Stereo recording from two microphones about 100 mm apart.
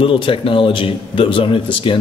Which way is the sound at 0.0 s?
60° left (ahead or behind).